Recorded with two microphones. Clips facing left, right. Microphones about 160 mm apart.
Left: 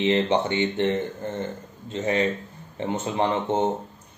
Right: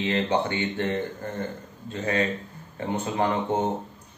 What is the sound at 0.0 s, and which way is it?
Speech, 20° left (ahead or behind).